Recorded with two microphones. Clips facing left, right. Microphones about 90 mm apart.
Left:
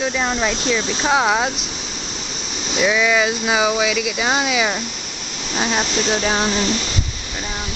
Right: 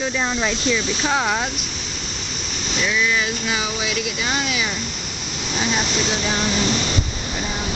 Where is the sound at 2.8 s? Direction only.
80° left.